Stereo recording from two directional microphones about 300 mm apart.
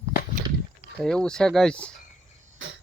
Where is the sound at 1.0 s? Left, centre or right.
Centre.